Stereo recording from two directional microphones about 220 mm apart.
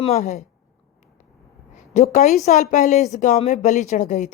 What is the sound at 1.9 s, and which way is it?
A woman's voice, 35° left (ahead or behind).